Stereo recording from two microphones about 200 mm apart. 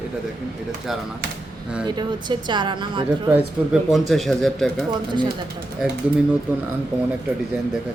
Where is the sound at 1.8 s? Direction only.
20° right (ahead or behind).